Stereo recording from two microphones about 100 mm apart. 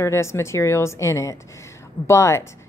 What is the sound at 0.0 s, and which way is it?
A woman's voice, 30° left (ahead or behind).